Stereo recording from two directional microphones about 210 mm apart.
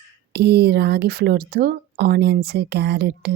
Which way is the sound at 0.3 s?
50° right (ahead or behind).